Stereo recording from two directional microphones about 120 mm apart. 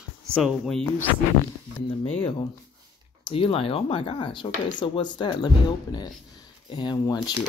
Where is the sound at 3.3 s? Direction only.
45° left (ahead or behind).